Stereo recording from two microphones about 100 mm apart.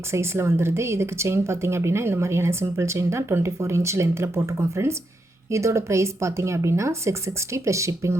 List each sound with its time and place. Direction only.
0.1 s speech: 25° right (ahead or behind)